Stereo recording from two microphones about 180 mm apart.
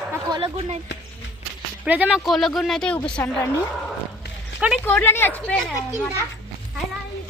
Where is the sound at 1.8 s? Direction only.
10° right (ahead or behind).